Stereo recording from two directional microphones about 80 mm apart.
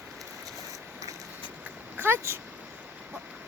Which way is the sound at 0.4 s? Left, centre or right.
Right.